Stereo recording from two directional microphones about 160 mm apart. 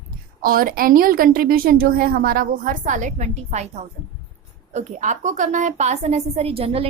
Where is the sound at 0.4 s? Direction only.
65° right (ahead or behind).